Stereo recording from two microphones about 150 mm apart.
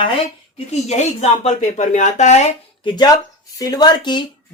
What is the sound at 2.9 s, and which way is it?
Speech, 25° left (ahead or behind).